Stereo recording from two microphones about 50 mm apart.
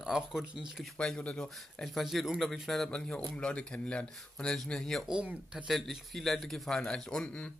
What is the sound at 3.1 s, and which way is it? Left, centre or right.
Speech, left.